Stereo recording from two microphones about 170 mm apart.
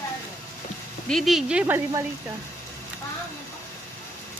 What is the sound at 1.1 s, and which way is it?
Speech, centre (ahead or behind).